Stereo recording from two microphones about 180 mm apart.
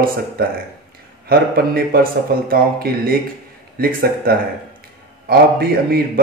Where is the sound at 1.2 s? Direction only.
55° right (ahead or behind).